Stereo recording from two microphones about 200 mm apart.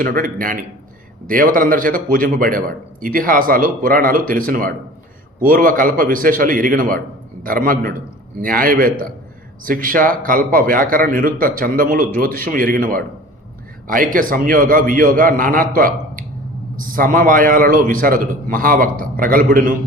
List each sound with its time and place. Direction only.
0.0 s a man's voice: 45° right (ahead or behind)